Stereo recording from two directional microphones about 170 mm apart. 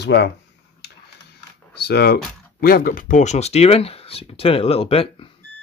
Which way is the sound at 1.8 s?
70° left (ahead or behind).